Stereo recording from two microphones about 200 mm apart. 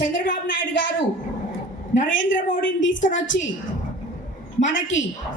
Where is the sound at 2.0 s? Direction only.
70° left (ahead or behind).